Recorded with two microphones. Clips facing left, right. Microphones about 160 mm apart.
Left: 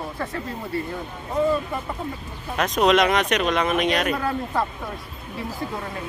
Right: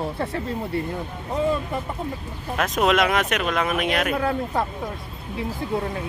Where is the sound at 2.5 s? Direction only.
5° right (ahead or behind).